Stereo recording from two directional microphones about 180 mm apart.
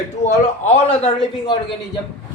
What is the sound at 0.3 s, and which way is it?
Speech, 35° left (ahead or behind).